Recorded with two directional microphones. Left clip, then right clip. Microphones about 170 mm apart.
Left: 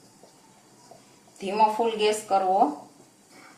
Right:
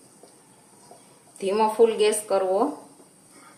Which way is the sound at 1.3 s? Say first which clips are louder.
Right 1 dB; 35° right (ahead or behind).